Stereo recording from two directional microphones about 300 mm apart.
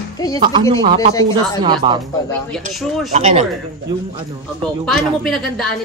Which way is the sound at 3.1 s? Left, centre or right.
Right.